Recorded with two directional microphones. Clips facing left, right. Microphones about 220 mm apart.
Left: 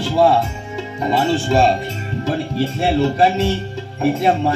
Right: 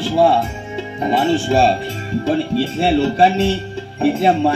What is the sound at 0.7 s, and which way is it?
Speech, 25° right (ahead or behind).